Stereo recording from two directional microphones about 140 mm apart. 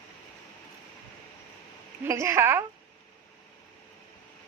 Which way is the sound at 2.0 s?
20° right (ahead or behind).